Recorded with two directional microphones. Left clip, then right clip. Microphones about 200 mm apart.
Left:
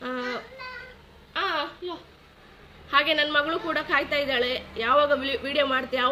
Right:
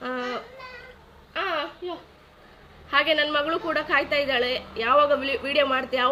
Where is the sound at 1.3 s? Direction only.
10° left (ahead or behind).